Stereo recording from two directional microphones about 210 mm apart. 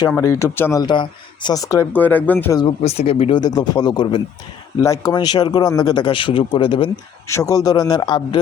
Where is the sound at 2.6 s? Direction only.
25° left (ahead or behind).